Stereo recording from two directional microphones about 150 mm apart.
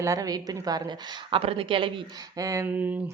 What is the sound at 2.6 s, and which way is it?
Mantra, 10° right (ahead or behind).